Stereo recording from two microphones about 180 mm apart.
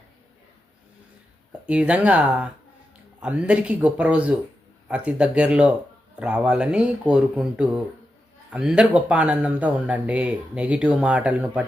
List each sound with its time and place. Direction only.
1.6 s speech: 5° right (ahead or behind)